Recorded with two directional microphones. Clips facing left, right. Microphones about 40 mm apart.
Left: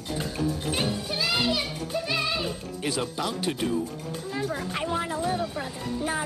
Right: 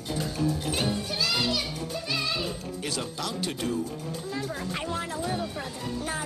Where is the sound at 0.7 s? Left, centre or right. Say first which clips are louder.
Left 1 dB; centre.